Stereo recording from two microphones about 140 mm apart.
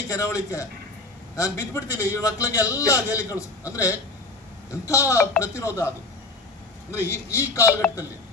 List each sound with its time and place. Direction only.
0.1 s a man's voice: 25° left (ahead or behind)
7.1 s a man's voice: 20° left (ahead or behind)